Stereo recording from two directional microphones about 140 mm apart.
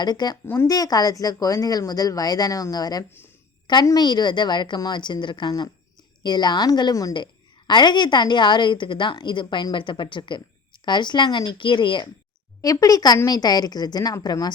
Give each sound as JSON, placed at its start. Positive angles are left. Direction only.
{"t": 0.0, "sound": "a woman's voice", "side_deg": 30}
{"t": 0.4, "sound": "a woman's voice", "side_deg": 15}